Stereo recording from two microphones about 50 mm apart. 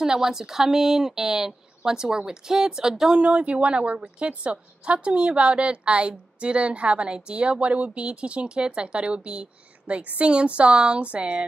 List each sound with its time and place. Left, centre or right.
0.0 s a woman's voice: centre
3.2 s speech: right